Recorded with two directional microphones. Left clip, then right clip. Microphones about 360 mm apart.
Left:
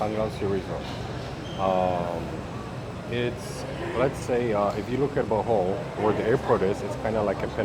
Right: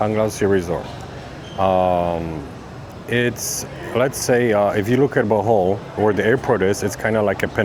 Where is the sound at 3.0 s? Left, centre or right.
Right.